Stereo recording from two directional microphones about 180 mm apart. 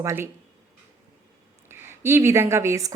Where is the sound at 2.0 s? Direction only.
15° right (ahead or behind).